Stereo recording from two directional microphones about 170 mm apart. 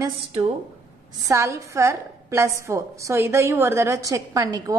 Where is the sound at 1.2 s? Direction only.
15° right (ahead or behind).